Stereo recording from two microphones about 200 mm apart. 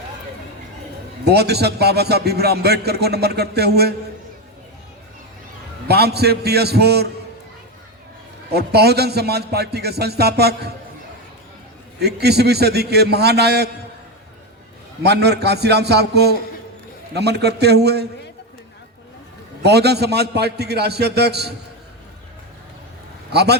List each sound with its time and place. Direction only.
1.2 s a man's voice: 55° right (ahead or behind)
5.9 s a man's voice: 55° right (ahead or behind)
8.5 s a man's voice: 55° right (ahead or behind)
11.9 s a man's voice: 55° right (ahead or behind)
15.0 s a man's voice: 55° right (ahead or behind)
19.6 s a man's voice: 55° right (ahead or behind)
23.3 s a man's voice: 55° right (ahead or behind)